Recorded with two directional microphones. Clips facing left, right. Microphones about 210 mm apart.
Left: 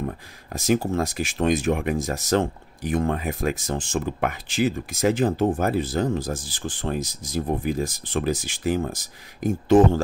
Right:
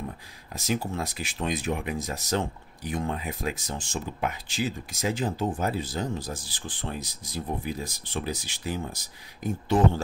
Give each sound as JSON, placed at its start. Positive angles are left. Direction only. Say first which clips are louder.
{"t": 0.0, "sound": "speech", "louder": "left 7 dB", "side_deg": 50}